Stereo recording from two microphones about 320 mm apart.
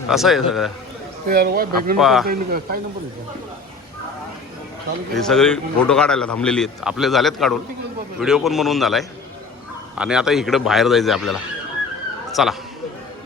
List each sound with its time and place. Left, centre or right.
0.1 s a man's voice: centre
1.3 s speech: right
2.0 s a man's voice: centre
2.2 s speech: right
5.1 s a man's voice: centre
12.4 s a man's voice: centre